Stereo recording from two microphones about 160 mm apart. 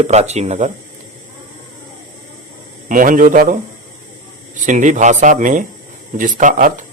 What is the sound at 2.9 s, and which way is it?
Speech, 55° right (ahead or behind).